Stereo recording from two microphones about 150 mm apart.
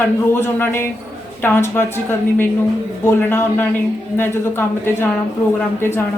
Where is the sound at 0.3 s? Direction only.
15° left (ahead or behind).